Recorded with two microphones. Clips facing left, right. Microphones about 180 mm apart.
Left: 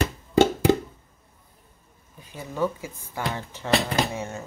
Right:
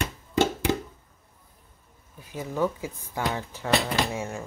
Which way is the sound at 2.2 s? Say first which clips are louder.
Even; 10° right (ahead or behind).